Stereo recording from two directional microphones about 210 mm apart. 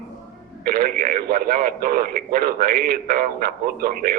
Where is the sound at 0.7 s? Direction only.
45° right (ahead or behind).